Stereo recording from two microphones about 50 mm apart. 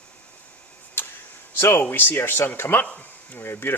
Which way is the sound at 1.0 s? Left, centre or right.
Left.